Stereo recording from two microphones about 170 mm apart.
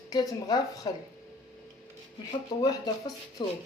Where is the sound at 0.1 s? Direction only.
25° left (ahead or behind).